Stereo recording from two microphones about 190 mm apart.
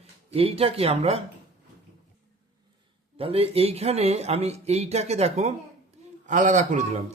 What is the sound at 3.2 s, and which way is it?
Speech, 30° right (ahead or behind).